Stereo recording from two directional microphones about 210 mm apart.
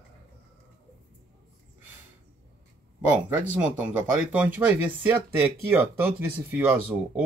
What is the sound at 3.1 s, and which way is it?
A man's voice, 10° right (ahead or behind).